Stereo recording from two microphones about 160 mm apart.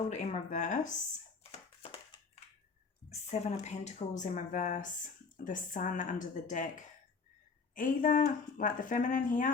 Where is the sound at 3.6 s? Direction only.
45° left (ahead or behind).